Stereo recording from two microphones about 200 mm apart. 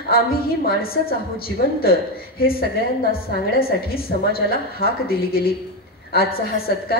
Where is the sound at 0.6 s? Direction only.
50° left (ahead or behind).